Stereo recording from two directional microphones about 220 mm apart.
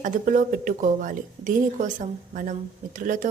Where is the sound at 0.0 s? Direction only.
35° right (ahead or behind).